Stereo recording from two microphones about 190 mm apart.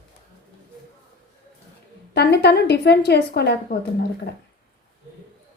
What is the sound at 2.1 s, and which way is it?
Speech, 60° left (ahead or behind).